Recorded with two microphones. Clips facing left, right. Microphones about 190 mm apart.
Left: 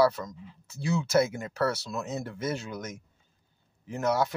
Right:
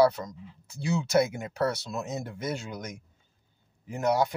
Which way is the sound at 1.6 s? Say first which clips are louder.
Even; 15° right (ahead or behind).